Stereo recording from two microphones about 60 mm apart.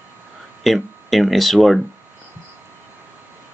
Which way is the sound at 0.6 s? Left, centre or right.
Centre.